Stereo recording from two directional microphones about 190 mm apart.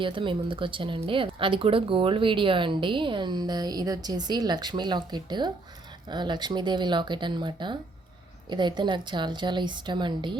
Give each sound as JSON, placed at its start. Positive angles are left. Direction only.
{"t": 0.0, "sound": "speech", "side_deg": -25}